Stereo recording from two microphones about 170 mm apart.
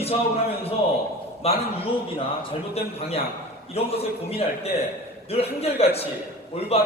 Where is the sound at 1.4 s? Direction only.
35° left (ahead or behind).